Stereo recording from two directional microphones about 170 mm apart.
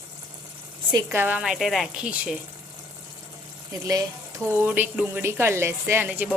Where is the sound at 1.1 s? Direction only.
10° right (ahead or behind).